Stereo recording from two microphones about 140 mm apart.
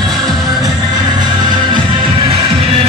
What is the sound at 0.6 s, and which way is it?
Music, 30° right (ahead or behind).